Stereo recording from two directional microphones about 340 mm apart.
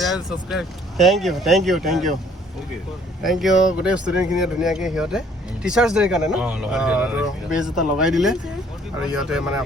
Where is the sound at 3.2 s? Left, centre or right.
Centre.